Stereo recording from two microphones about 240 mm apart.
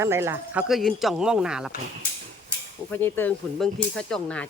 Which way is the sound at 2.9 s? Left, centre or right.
Centre.